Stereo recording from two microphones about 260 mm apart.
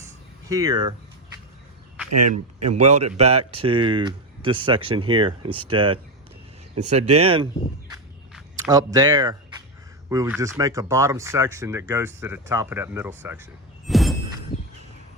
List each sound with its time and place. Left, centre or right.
0.4 s speech: centre
2.0 s speech: right
2.7 s speech: right
8.5 s speech: centre